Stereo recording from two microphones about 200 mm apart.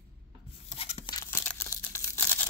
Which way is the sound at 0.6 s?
30° left (ahead or behind).